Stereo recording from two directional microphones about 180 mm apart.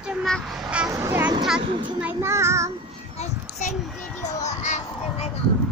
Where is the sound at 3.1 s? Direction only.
40° left (ahead or behind).